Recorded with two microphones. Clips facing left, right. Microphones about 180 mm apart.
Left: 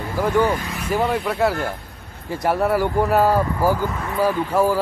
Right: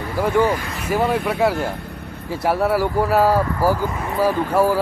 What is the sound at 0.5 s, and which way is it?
Speech, 5° right (ahead or behind).